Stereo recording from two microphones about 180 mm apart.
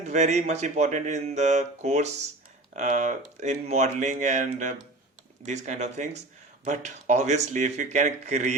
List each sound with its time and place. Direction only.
0.0 s speech: 40° right (ahead or behind)